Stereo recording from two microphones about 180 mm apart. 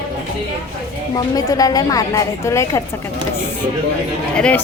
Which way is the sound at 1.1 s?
20° left (ahead or behind).